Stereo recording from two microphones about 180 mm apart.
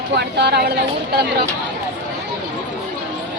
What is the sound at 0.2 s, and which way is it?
Speech, 65° right (ahead or behind).